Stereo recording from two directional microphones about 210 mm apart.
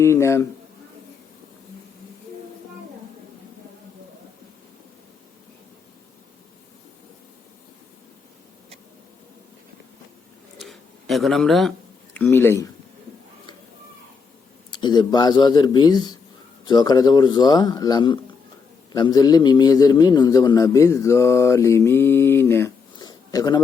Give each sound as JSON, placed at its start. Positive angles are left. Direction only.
{"t": 0.0, "sound": "a man's voice", "side_deg": 15}
{"t": 10.7, "sound": "a sound", "side_deg": 0}
{"t": 12.1, "sound": "a man's voice", "side_deg": 10}
{"t": 14.7, "sound": "a man's voice", "side_deg": 20}